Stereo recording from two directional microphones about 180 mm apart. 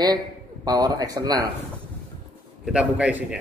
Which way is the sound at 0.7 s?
20° right (ahead or behind).